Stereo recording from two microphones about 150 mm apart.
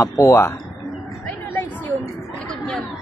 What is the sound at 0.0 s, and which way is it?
Speech, 20° left (ahead or behind).